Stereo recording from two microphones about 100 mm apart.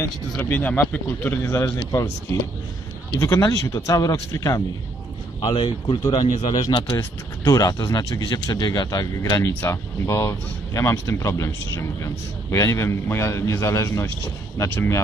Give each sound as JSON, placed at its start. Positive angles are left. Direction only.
{"t": 0.0, "sound": "speech", "side_deg": 20}
{"t": 3.1, "sound": "speech", "side_deg": 35}
{"t": 5.4, "sound": "speech", "side_deg": 60}
{"t": 6.9, "sound": "speech", "side_deg": 35}